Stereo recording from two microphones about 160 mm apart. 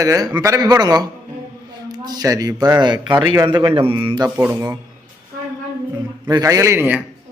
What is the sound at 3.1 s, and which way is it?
Speech, 15° right (ahead or behind).